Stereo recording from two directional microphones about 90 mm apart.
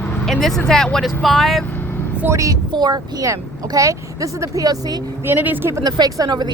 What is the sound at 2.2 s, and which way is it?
Speech, 35° right (ahead or behind).